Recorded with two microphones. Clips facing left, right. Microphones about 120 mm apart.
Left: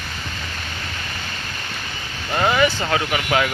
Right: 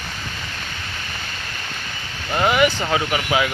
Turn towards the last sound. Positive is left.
turn(degrees=-20)  # may be behind; listen again after turning